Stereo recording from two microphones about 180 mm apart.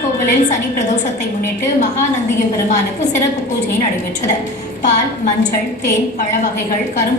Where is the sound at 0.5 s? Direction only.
40° left (ahead or behind).